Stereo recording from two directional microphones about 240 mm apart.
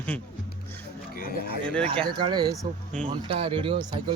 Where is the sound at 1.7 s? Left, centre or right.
Centre.